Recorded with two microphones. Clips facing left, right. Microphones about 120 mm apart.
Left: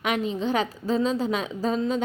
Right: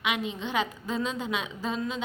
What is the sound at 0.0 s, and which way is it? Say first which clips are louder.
A woman's voice: left 5 dB; 40° left (ahead or behind).